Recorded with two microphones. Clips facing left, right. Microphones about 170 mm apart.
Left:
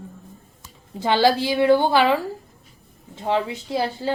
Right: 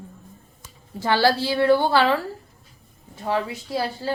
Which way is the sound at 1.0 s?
20° left (ahead or behind).